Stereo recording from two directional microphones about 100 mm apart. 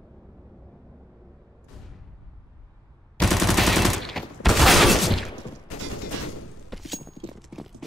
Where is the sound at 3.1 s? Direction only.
Centre (ahead or behind).